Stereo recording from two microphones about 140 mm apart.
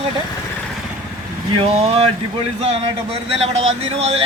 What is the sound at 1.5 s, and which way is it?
A man's voice, 45° right (ahead or behind).